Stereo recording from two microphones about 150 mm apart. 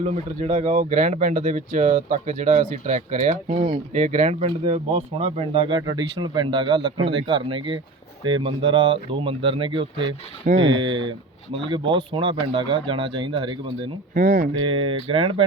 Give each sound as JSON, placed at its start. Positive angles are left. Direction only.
{"t": 0.0, "sound": "speech", "side_deg": -50}
{"t": 4.4, "sound": "speech", "side_deg": -35}
{"t": 14.1, "sound": "speech", "side_deg": -65}
{"t": 14.6, "sound": "speech", "side_deg": -35}